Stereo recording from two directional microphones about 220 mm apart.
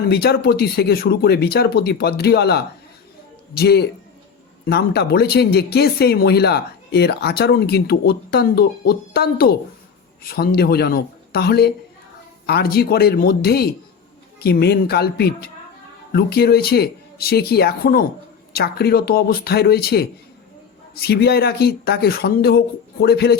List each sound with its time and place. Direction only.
0.1 s speech: 45° left (ahead or behind)